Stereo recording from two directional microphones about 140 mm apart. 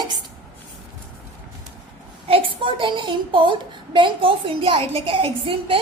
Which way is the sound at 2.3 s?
40° right (ahead or behind).